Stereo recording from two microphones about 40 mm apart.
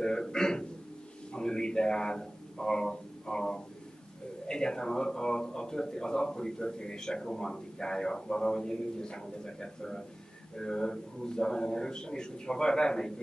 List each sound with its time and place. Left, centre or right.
0.0 s speech: centre
1.3 s a sound: centre
4.5 s speech: centre